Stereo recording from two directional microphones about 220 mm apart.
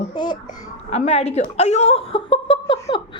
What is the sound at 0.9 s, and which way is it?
A woman's voice, 30° left (ahead or behind).